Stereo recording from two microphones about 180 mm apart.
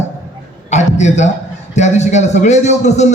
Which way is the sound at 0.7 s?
40° left (ahead or behind).